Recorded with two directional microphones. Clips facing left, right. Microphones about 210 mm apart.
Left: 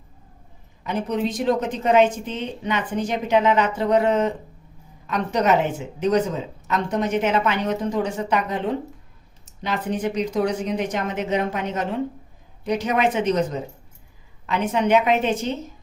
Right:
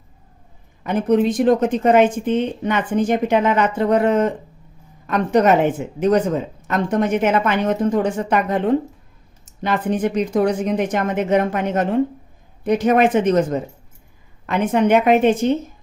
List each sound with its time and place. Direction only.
0.9 s speech: 55° right (ahead or behind)